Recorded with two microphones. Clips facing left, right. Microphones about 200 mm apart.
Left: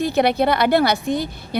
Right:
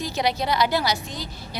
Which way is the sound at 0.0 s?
60° left (ahead or behind).